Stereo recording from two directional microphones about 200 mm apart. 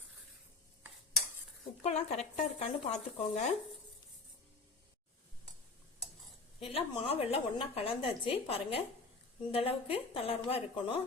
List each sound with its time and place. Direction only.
1.8 s speech: 35° left (ahead or behind)
6.6 s a woman's voice: 30° left (ahead or behind)